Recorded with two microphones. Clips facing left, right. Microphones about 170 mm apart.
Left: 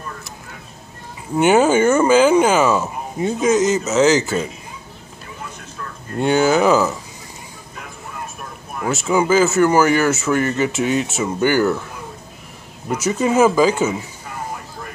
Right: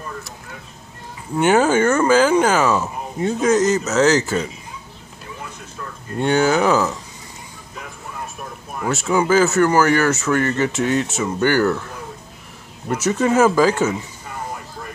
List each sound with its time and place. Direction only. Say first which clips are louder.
1.4 s speech: left 2 dB; 5° left (ahead or behind)
6.1 s speech: left 1 dB; 5° left (ahead or behind)
8.8 s speech: left 1 dB; 5° left (ahead or behind)
12.9 s speech: even; centre (ahead or behind)